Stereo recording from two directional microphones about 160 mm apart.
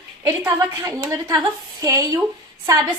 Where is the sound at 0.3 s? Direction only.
15° right (ahead or behind).